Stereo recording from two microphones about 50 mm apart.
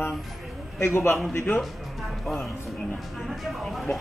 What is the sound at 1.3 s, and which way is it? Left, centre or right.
Music, left.